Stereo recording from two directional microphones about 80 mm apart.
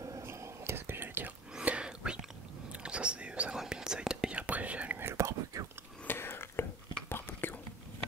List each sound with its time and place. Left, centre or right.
0.0 s whispering: right
1.5 s whispering: centre
5.0 s whispering: right
6.0 s whispering: left